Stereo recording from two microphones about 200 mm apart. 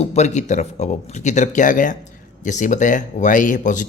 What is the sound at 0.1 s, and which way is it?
Speech, 35° left (ahead or behind).